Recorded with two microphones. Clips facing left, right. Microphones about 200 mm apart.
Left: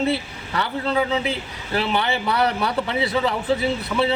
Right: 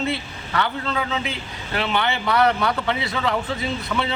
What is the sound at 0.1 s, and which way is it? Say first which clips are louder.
A man's voice: left 2 dB; 35° left (ahead or behind).